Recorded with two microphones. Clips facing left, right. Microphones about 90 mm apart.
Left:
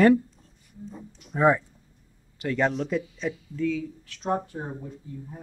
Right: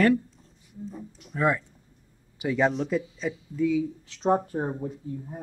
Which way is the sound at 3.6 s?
20° right (ahead or behind).